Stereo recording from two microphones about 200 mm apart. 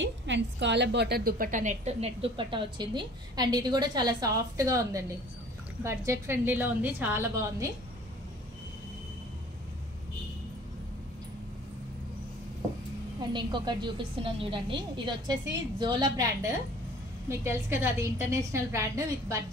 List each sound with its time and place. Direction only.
0.0 s a woman's voice: 60° right (ahead or behind); by 7.7 s 15° right (ahead or behind)
13.2 s a woman's voice: 25° right (ahead or behind)
17.4 s a woman's voice: 10° right (ahead or behind)